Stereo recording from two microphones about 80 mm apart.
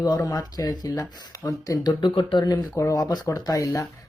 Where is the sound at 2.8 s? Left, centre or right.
Left.